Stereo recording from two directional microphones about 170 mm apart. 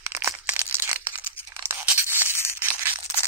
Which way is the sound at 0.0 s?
15° right (ahead or behind).